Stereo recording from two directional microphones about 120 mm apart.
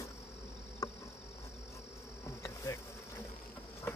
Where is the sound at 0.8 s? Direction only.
35° left (ahead or behind).